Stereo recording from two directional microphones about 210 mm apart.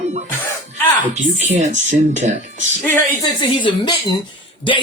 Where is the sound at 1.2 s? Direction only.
35° right (ahead or behind).